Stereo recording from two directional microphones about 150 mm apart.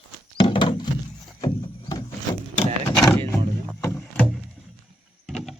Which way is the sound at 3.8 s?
15° left (ahead or behind).